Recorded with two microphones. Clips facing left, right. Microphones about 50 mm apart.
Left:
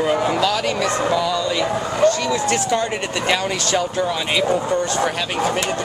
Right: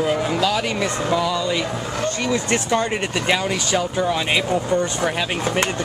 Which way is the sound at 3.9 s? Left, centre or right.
Centre.